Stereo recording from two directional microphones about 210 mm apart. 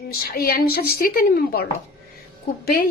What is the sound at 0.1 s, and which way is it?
Speech, 45° left (ahead or behind).